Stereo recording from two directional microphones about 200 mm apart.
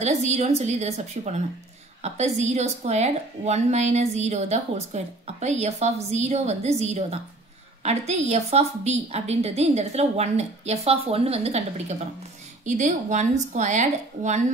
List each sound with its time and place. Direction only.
0.0 s a woman's voice: 35° right (ahead or behind)
12.6 s a woman's voice: 35° right (ahead or behind)